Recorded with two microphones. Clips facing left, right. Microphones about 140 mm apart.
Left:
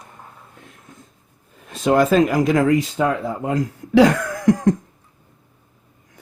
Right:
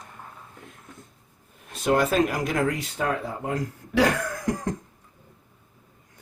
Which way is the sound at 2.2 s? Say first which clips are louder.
Left 8 dB; 90° left.